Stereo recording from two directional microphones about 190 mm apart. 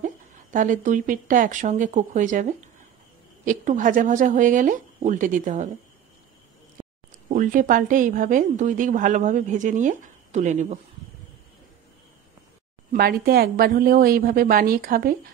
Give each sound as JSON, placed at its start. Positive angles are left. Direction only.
{"t": 0.0, "sound": "a woman's voice", "side_deg": -45}
{"t": 6.8, "sound": "a sound", "side_deg": -15}
{"t": 7.2, "sound": "a woman's voice", "side_deg": -45}
{"t": 12.9, "sound": "a woman's voice", "side_deg": -55}